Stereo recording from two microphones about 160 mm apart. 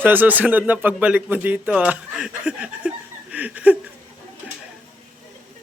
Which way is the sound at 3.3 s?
10° right (ahead or behind).